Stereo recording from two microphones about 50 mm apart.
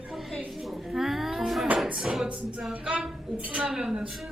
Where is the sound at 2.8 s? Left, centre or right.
Right.